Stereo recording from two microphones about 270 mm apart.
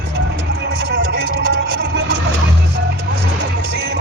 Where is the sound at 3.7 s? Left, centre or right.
Right.